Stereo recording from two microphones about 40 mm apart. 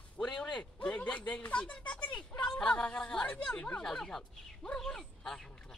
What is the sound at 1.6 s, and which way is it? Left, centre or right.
Speech, left.